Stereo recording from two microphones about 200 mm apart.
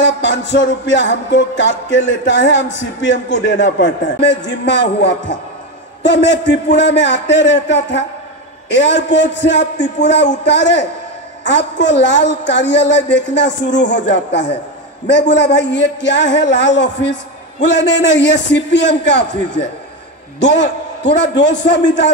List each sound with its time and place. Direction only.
0.0 s a man's voice: 60° left (ahead or behind)